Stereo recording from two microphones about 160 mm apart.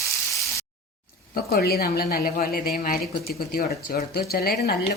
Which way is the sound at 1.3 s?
70° left (ahead or behind).